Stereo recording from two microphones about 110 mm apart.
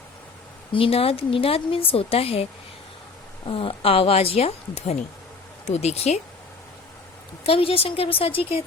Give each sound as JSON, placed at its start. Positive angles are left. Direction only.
{"t": 0.7, "sound": "a woman's voice", "side_deg": 55}
{"t": 7.4, "sound": "a woman's voice", "side_deg": 60}